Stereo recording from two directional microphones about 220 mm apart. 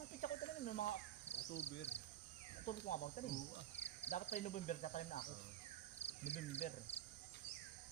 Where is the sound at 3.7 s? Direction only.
30° left (ahead or behind).